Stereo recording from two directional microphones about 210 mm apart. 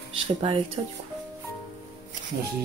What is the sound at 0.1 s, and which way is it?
Speech, 25° right (ahead or behind).